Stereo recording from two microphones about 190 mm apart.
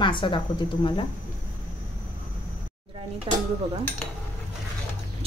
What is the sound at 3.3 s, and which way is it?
Speech, 30° right (ahead or behind).